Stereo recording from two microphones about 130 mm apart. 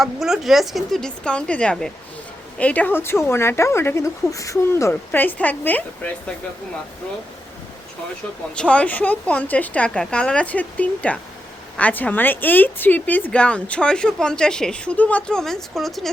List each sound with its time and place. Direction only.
0.0 s speech: centre (ahead or behind)
8.5 s speech: 10° left (ahead or behind)